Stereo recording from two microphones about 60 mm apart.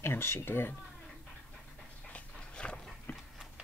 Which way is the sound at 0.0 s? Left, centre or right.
Left.